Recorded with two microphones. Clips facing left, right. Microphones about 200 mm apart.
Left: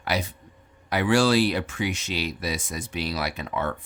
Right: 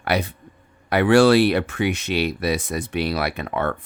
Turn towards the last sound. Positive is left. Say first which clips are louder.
# right 4 dB
turn(degrees=-60)  # may be behind; listen again after turning